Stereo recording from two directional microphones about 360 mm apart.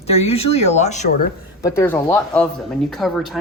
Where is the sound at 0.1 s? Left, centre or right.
Centre.